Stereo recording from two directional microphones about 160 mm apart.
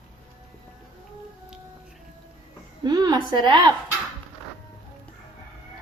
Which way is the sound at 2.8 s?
25° right (ahead or behind).